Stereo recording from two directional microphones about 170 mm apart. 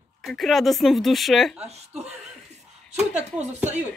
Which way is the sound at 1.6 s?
40° right (ahead or behind).